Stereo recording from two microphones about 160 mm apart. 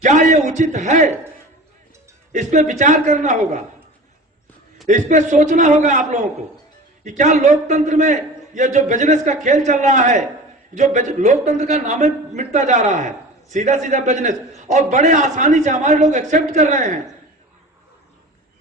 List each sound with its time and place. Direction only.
0.0 s a man's voice: 50° right (ahead or behind)
2.3 s a man's voice: 50° right (ahead or behind)
4.9 s a man's voice: 50° right (ahead or behind)